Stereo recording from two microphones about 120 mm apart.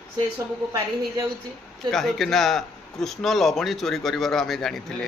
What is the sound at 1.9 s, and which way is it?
A man's voice, centre (ahead or behind).